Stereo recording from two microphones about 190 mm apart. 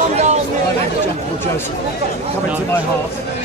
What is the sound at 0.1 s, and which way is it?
Chatter, 35° right (ahead or behind).